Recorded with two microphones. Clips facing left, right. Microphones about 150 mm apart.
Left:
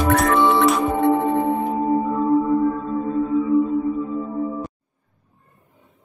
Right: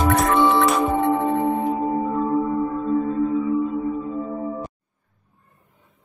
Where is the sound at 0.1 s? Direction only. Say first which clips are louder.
Left 3 dB; centre (ahead or behind).